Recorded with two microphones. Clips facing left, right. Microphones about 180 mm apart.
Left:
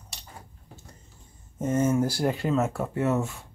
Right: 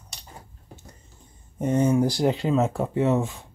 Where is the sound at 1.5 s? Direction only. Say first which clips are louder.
Right 3 dB; 15° right (ahead or behind).